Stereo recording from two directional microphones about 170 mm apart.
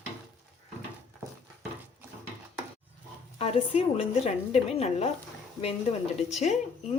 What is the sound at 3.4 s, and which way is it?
Speech, 35° left (ahead or behind).